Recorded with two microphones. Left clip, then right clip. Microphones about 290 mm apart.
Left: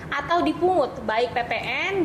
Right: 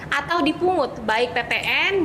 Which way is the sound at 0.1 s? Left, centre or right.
Right.